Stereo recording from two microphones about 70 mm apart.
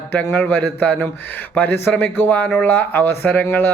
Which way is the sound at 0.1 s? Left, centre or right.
Left.